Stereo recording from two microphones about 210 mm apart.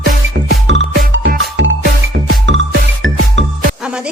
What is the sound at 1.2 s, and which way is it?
Music, 45° right (ahead or behind).